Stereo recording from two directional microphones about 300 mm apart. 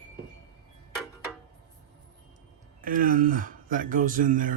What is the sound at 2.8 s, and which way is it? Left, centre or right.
Speech, right.